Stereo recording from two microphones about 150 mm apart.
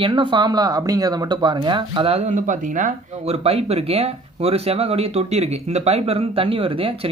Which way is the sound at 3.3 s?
40° right (ahead or behind).